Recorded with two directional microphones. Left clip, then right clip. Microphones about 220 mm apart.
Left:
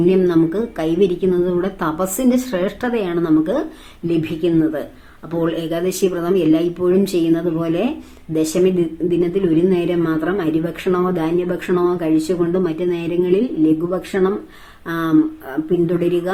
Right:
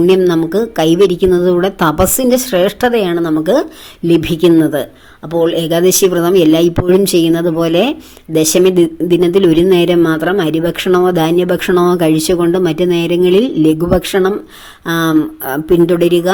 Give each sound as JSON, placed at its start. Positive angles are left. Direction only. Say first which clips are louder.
{"t": 0.1, "sound": "a woman's voice", "louder": "right 5 dB", "side_deg": -40}